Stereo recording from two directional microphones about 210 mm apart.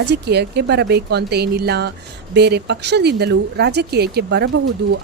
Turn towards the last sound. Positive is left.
turn(degrees=-55)  # may be behind; listen again after turning